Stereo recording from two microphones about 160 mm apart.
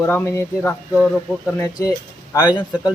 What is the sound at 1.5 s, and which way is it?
Speech, 20° left (ahead or behind).